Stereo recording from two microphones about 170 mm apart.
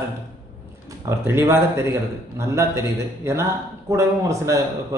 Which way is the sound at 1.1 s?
15° right (ahead or behind).